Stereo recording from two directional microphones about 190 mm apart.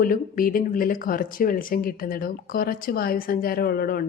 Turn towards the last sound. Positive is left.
turn(degrees=50)  # may be behind; listen again after turning